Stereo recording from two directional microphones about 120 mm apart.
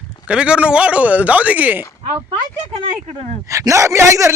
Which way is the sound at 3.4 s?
25° right (ahead or behind).